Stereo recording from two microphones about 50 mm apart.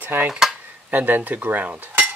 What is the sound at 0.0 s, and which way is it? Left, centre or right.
Cutlery, right.